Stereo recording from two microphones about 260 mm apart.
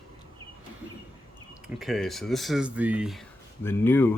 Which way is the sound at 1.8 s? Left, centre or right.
Centre.